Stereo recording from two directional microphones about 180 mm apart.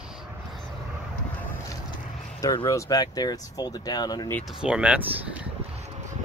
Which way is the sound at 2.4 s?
20° left (ahead or behind).